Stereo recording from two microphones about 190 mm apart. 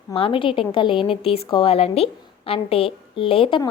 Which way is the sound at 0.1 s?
30° left (ahead or behind).